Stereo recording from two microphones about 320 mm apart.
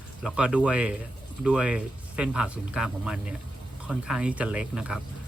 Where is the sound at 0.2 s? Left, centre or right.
Centre.